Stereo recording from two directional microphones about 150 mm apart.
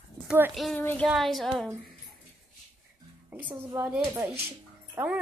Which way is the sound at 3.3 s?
10° right (ahead or behind).